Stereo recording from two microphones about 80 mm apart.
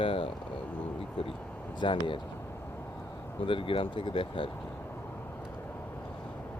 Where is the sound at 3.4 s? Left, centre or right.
Left.